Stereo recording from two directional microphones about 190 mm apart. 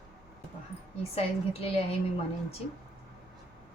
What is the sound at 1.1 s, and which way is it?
Speech, 30° left (ahead or behind).